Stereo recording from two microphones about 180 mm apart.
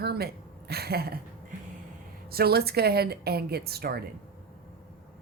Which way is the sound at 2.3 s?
60° right (ahead or behind).